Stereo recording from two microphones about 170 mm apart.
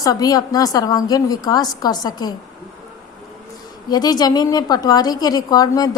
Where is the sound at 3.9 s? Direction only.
25° left (ahead or behind).